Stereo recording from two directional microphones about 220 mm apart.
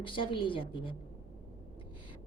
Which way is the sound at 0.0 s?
25° left (ahead or behind).